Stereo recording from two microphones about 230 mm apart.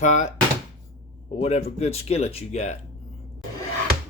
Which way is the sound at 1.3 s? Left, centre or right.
Left.